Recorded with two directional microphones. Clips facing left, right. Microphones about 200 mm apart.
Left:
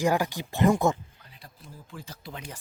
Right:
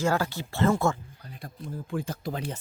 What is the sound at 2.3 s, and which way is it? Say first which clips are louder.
Speech: right 6 dB; 35° right (ahead or behind).